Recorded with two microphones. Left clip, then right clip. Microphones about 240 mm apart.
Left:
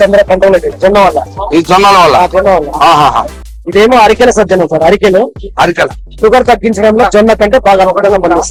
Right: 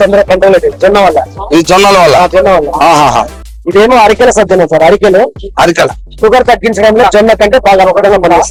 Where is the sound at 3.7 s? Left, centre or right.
Right.